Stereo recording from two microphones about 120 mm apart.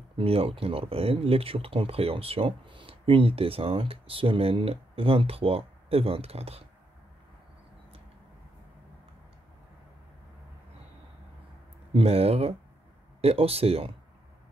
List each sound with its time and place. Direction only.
0.2 s speech: 55° right (ahead or behind)
11.9 s speech: 55° right (ahead or behind)